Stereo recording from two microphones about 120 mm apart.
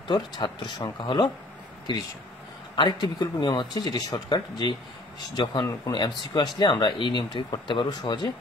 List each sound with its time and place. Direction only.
0.1 s speech: 35° left (ahead or behind)